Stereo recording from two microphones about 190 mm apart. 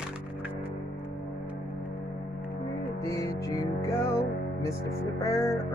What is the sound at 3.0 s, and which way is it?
Music, 15° left (ahead or behind).